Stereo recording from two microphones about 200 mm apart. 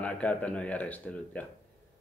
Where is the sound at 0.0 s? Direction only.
5° left (ahead or behind).